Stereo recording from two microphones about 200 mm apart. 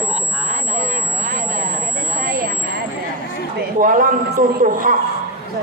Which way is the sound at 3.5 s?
45° right (ahead or behind).